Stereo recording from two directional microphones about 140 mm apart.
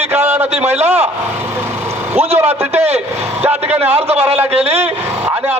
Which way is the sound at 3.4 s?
15° right (ahead or behind).